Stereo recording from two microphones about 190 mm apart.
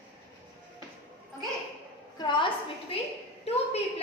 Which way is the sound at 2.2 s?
25° left (ahead or behind).